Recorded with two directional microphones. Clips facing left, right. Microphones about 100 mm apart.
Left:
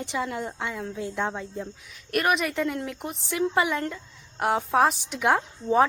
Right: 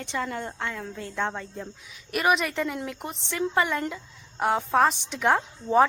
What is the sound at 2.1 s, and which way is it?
A woman's voice, centre (ahead or behind).